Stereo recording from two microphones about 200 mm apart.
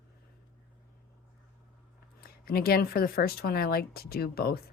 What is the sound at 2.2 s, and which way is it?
Speech, 50° left (ahead or behind).